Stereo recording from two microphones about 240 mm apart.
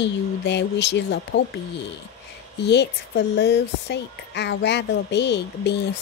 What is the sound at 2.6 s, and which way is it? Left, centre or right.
Speech, left.